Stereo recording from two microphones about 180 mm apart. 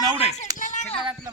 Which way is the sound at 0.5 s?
45° left (ahead or behind).